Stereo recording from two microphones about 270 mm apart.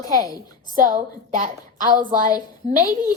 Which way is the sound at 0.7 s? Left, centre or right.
Right.